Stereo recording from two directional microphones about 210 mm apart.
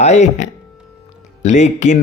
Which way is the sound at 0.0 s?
35° left (ahead or behind).